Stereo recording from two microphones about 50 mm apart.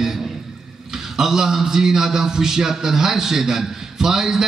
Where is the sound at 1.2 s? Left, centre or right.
Centre.